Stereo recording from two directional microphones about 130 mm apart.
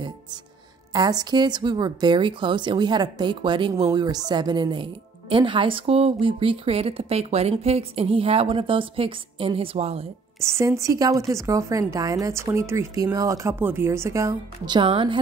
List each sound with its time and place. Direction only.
0.9 s a woman's voice: 30° right (ahead or behind); by 10.0 s 50° right (ahead or behind)
10.4 s speech: 20° right (ahead or behind)
14.7 s a woman's voice: 40° right (ahead or behind)